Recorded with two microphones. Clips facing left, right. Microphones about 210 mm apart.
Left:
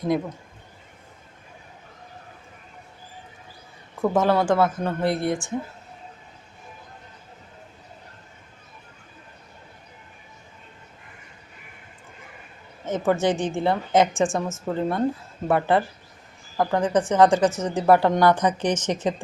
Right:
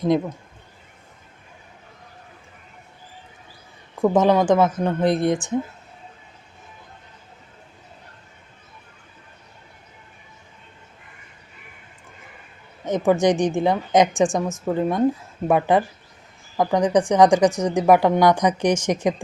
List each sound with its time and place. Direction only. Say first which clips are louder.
4.0 s a woman's voice: right 4 dB; 15° right (ahead or behind)
12.8 s a woman's voice: right 4 dB; 15° right (ahead or behind)